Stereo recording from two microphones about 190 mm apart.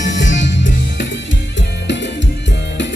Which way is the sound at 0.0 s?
40° left (ahead or behind).